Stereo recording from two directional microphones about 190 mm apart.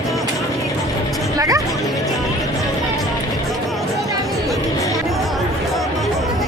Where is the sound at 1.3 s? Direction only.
20° right (ahead or behind).